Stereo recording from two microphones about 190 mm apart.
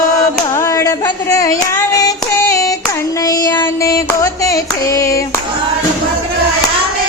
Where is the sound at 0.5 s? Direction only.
15° left (ahead or behind).